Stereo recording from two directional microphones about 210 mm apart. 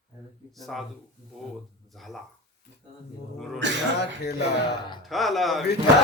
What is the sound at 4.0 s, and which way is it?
Speech, 50° left (ahead or behind).